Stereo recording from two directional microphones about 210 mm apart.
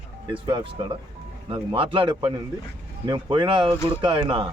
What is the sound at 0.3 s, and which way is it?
Speech, 25° right (ahead or behind).